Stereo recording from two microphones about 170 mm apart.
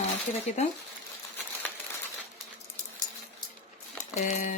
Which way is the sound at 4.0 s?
45° left (ahead or behind).